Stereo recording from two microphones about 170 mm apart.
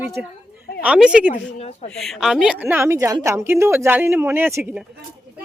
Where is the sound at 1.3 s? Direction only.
40° left (ahead or behind).